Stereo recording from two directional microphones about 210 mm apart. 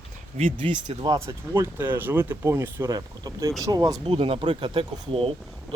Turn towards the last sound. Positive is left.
turn(degrees=-25)  # may be behind; listen again after turning